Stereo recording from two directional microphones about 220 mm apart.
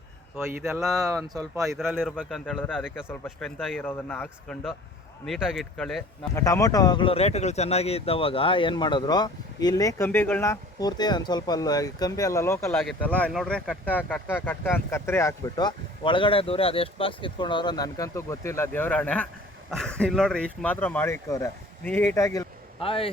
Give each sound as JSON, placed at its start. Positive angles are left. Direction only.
{"t": 0.3, "sound": "speech", "side_deg": -10}
{"t": 1.7, "sound": "speech", "side_deg": -5}
{"t": 6.4, "sound": "speech", "side_deg": 15}
{"t": 22.8, "sound": "speech", "side_deg": 25}